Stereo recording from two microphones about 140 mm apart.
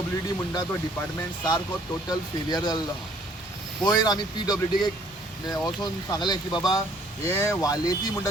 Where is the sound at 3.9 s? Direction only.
30° left (ahead or behind).